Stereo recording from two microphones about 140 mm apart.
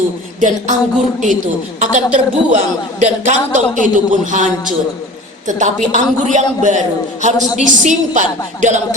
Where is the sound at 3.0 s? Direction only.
60° right (ahead or behind).